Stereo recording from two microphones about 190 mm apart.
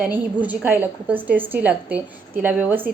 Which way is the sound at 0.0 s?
10° right (ahead or behind).